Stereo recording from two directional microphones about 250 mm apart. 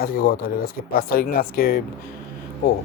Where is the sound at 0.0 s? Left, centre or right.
Left.